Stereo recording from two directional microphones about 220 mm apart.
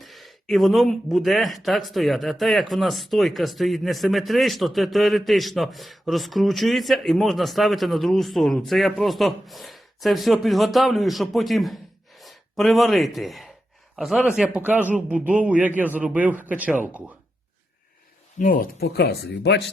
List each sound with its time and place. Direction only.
0.0 s speech: centre (ahead or behind)
18.3 s speech: 40° left (ahead or behind)